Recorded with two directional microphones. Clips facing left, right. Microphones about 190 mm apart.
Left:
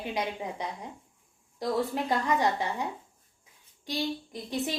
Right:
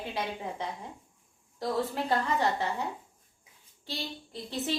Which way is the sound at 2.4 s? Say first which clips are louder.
Left 1 dB; 15° left (ahead or behind).